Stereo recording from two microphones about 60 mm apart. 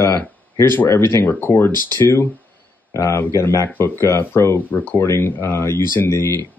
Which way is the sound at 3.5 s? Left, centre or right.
Left.